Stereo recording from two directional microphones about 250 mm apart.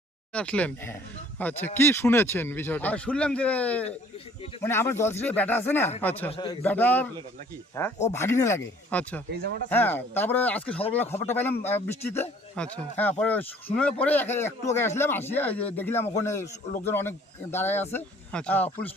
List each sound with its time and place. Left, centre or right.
0.3 s speech: centre
6.3 s speech: centre